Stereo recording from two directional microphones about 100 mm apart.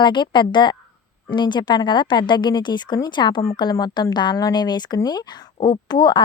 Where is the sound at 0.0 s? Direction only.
50° left (ahead or behind).